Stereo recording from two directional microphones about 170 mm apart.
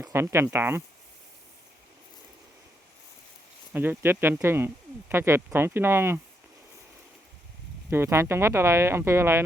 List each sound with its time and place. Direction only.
0.0 s speech: 15° right (ahead or behind)
3.7 s speech: 10° right (ahead or behind)
7.9 s speech: 15° right (ahead or behind)